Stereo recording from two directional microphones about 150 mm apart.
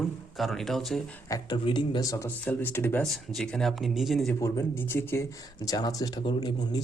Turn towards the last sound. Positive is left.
turn(degrees=30)  # may be behind; listen again after turning